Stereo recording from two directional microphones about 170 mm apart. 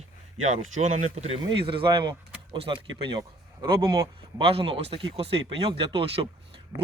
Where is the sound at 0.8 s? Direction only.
45° right (ahead or behind).